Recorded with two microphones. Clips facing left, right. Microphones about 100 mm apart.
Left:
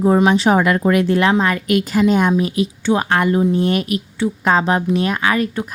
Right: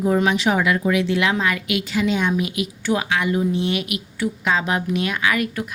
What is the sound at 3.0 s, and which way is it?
A woman's voice, 50° left (ahead or behind).